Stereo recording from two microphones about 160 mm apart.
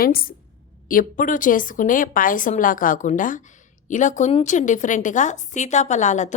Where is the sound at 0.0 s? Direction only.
65° left (ahead or behind).